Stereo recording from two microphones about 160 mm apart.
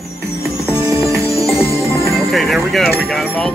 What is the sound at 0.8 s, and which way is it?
Music, 20° right (ahead or behind).